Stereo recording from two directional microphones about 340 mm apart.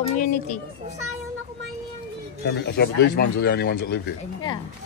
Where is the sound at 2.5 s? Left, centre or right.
Left.